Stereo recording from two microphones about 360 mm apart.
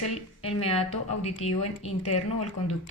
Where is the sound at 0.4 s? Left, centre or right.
Centre.